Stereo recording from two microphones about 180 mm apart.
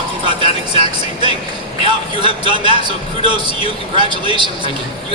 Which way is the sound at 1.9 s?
25° right (ahead or behind).